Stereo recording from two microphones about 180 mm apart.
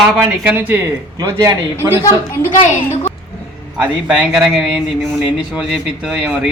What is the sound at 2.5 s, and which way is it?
Speech, 40° left (ahead or behind).